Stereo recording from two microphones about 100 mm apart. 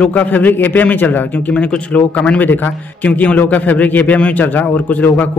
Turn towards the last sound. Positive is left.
turn(degrees=15)  # may be behind; listen again after turning